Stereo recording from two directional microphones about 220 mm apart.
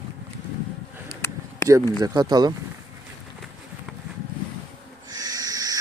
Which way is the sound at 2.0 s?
20° right (ahead or behind).